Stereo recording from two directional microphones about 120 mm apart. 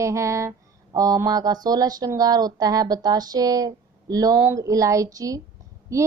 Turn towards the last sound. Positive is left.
turn(degrees=-25)  # may be behind; listen again after turning